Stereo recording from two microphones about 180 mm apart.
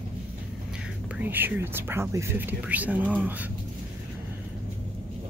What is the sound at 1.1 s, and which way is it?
Speech, 10° right (ahead or behind).